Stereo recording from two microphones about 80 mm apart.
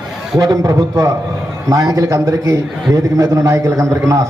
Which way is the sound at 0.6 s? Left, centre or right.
Right.